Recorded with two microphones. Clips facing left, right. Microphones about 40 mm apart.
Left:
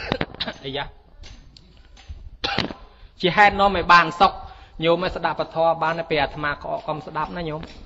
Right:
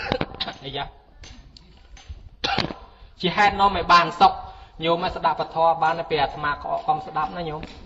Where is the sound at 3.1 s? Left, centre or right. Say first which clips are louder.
Left 3 dB; left.